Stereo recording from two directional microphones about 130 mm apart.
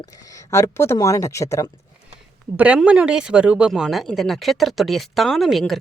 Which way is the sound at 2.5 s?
10° right (ahead or behind).